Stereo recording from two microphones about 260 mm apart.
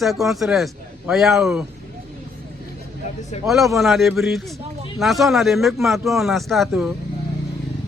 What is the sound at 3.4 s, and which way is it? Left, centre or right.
Speech, centre.